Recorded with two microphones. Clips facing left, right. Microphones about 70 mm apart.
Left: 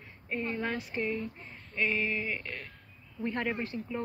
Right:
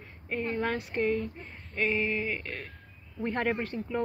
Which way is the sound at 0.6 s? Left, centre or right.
Right.